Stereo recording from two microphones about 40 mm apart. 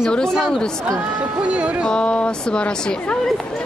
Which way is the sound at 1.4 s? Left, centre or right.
Right.